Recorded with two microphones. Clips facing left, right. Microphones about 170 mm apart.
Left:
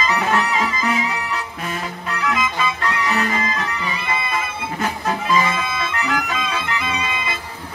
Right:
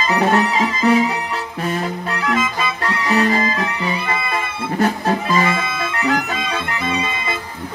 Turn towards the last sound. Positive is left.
turn(degrees=-35)  # may be behind; listen again after turning